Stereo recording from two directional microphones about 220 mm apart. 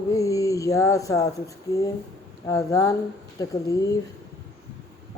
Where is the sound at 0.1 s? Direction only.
15° left (ahead or behind).